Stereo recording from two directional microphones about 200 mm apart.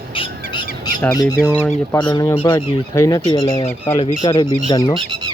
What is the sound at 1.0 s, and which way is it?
Speech, 15° left (ahead or behind).